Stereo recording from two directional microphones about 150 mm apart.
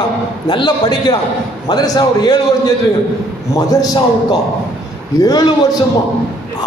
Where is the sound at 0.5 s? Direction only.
30° left (ahead or behind).